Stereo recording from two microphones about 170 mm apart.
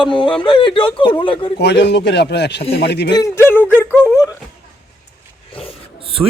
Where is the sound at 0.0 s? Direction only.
30° left (ahead or behind).